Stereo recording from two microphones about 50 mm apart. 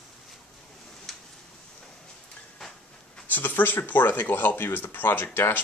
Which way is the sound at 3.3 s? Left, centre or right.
Left.